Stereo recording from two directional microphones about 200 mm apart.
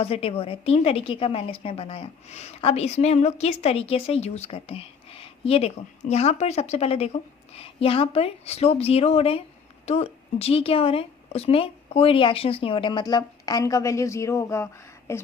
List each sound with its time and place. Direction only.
0.0 s a woman's voice: 30° left (ahead or behind); by 15.2 s 15° left (ahead or behind)